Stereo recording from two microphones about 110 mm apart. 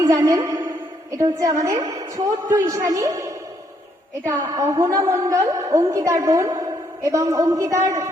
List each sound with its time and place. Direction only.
0.0 s a woman's voice: 30° right (ahead or behind)
4.5 s a woman's voice: 30° right (ahead or behind)